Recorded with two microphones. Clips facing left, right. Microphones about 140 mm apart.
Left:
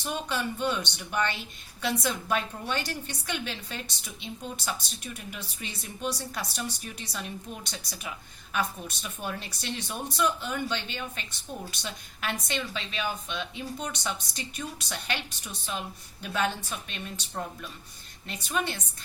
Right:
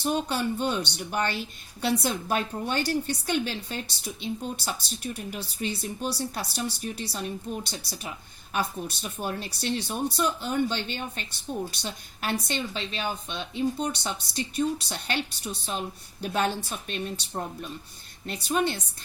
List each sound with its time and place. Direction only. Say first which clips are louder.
0.0 s speech: right 5 dB; 35° right (ahead or behind)
18.4 s speech: right 5 dB; 35° right (ahead or behind)